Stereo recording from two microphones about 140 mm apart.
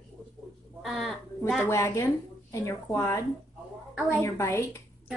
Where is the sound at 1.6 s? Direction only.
20° left (ahead or behind).